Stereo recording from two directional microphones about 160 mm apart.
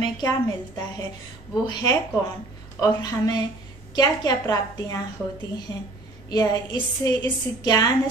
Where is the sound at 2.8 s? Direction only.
25° left (ahead or behind).